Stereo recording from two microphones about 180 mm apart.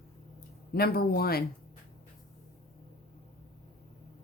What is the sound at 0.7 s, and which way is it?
Speech, 60° left (ahead or behind).